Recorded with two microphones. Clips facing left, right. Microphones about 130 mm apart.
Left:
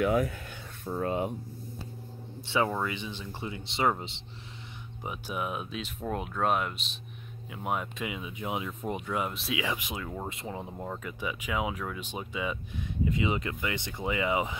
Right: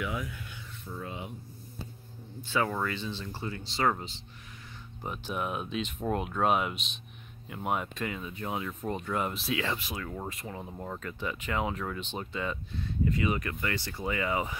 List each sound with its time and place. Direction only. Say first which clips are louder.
0.0 s speech: left 9 dB; 50° left (ahead or behind)
2.7 s speech: even; 15° left (ahead or behind)
5.0 s speech: even; 5° left (ahead or behind)
8.1 s speech: left 1 dB; 10° left (ahead or behind)
9.6 s speech: even; 15° left (ahead or behind)